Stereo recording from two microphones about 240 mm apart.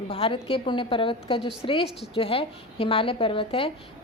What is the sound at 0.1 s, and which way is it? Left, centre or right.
A woman's voice, left.